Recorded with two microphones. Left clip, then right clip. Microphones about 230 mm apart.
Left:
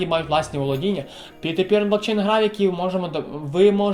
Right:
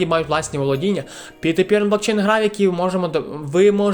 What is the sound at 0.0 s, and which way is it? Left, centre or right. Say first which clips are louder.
Speech: right 2 dB; right.